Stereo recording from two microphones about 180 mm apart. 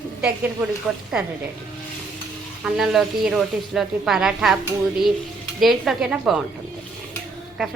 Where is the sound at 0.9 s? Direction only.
Centre (ahead or behind).